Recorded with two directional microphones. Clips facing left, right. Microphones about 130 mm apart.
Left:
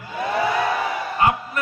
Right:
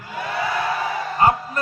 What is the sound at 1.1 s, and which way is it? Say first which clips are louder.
Speech: right 2 dB; 35° right (ahead or behind).